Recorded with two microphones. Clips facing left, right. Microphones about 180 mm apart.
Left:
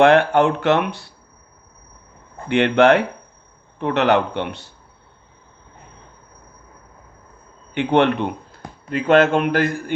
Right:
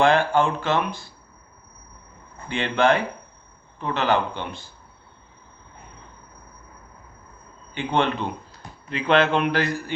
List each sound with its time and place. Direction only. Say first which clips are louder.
0.0 s speech: left 5 dB; 65° left (ahead or behind)
2.5 s speech: left 7 dB; 70° left (ahead or behind)
7.7 s speech: left 7 dB; 65° left (ahead or behind); by 9.9 s 50° left (ahead or behind)